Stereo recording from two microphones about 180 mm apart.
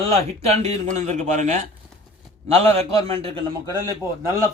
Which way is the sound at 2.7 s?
30° right (ahead or behind).